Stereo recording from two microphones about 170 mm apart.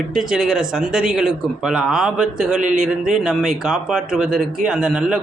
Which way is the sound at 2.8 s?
5° right (ahead or behind).